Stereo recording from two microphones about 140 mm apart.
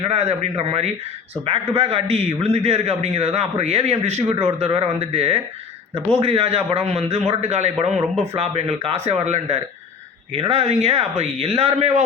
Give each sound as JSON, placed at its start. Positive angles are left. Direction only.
{"t": 0.1, "sound": "a man's voice", "side_deg": -50}